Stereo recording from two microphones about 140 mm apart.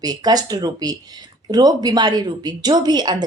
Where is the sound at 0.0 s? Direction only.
25° right (ahead or behind).